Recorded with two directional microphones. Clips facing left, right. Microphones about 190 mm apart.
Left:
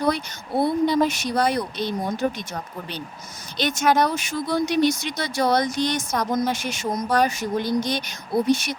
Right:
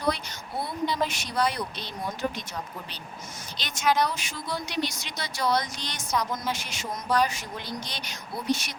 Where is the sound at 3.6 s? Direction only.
50° left (ahead or behind).